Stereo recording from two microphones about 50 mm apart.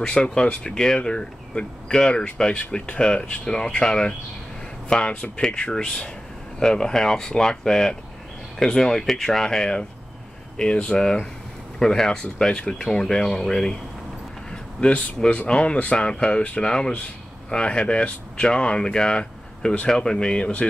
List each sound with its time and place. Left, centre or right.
0.0 s speech: centre
14.5 s a sound: left
15.3 s speech: left